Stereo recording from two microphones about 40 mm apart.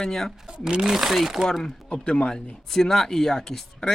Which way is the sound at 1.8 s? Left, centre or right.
Left.